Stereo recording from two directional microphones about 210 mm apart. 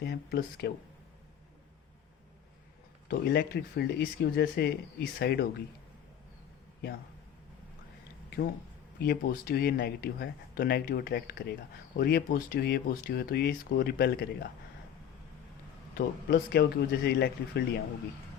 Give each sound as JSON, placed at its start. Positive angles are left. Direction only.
{"t": 0.0, "sound": "speech", "side_deg": 50}
{"t": 3.1, "sound": "speech", "side_deg": 50}
{"t": 9.0, "sound": "speech", "side_deg": 50}
{"t": 16.0, "sound": "speech", "side_deg": 50}